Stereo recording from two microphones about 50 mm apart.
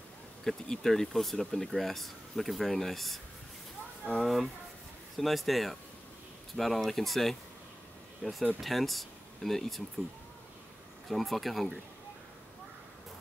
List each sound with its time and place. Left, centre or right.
0.4 s speech: centre
4.2 s speech: centre
11.1 s speech: centre